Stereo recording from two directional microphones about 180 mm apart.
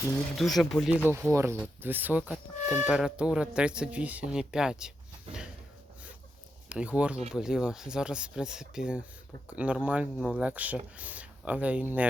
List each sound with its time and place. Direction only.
0.3 s speech: centre (ahead or behind)
1.0 s speech: 15° right (ahead or behind)
5.3 s a sound: 30° right (ahead or behind)
6.7 s speech: 5° right (ahead or behind)